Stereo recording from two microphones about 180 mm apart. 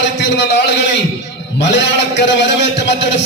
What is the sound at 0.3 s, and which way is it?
Speech, 75° left (ahead or behind).